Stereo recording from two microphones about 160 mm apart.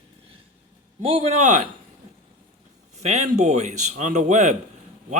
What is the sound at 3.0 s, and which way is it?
Speech, 45° right (ahead or behind).